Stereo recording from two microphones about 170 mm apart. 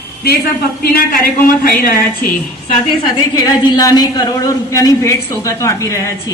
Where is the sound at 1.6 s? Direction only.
60° left (ahead or behind).